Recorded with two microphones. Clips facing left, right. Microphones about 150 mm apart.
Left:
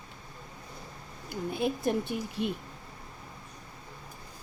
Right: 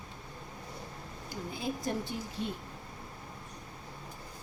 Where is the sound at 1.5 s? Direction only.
60° left (ahead or behind).